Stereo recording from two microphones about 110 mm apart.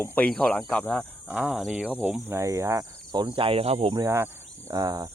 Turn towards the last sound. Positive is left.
turn(degrees=-35)  # may be behind; listen again after turning